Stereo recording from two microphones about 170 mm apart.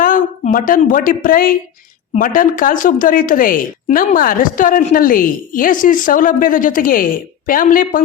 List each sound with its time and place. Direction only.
0.0 s a woman's voice: 55° left (ahead or behind)